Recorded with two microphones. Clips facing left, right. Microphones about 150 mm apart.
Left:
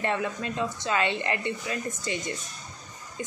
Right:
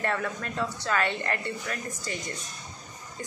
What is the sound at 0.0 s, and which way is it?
Speech, 15° left (ahead or behind).